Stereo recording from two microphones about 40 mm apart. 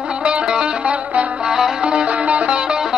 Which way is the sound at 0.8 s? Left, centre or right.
Right.